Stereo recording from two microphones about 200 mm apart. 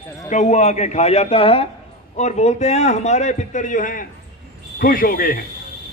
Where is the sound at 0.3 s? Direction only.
35° left (ahead or behind).